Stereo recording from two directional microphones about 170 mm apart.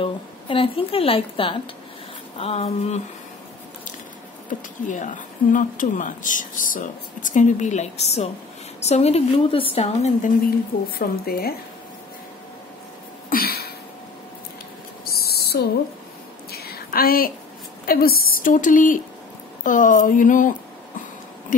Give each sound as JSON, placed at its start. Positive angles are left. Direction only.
{"t": 0.0, "sound": "a woman's voice", "side_deg": 30}
{"t": 4.5, "sound": "a woman's voice", "side_deg": 45}
{"t": 11.0, "sound": "speech", "side_deg": 60}
{"t": 13.3, "sound": "a sound", "side_deg": 65}
{"t": 15.0, "sound": "a sound", "side_deg": 65}
{"t": 17.8, "sound": "speech", "side_deg": 60}